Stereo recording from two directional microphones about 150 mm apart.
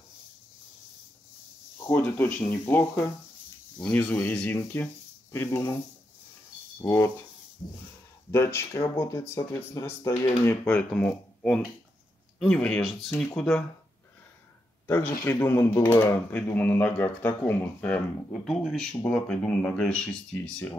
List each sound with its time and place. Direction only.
1.9 s speech: 10° left (ahead or behind)
6.8 s speech: 20° left (ahead or behind)
8.3 s speech: 15° left (ahead or behind)
14.9 s speech: 15° left (ahead or behind)